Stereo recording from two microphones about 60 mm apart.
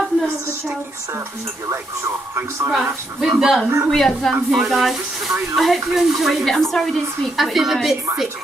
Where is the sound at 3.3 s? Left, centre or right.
Centre.